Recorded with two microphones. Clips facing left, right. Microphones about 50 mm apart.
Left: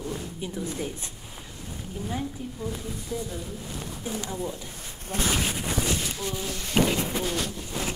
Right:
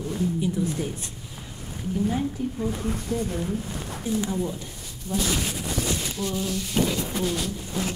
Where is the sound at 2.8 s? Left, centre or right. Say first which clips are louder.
Right 6 dB; right.